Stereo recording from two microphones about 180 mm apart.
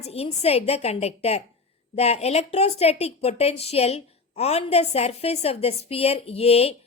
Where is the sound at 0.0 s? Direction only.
35° left (ahead or behind).